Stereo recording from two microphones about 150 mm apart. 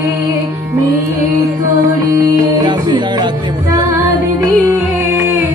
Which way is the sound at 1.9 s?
25° right (ahead or behind).